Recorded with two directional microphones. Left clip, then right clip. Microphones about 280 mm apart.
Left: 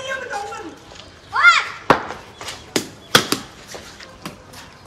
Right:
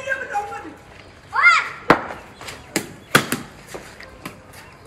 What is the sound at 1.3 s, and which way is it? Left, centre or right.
Children playing, left.